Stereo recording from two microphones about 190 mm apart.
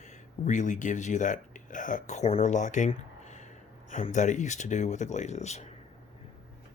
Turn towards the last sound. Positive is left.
turn(degrees=35)  # may be behind; listen again after turning